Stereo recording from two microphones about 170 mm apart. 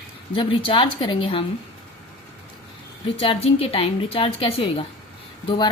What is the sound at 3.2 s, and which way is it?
A woman's voice, 35° left (ahead or behind).